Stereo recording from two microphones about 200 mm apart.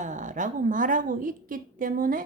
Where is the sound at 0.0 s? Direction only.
40° right (ahead or behind).